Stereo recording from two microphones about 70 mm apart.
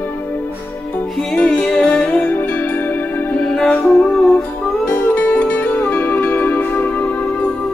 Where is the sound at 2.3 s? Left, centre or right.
Left.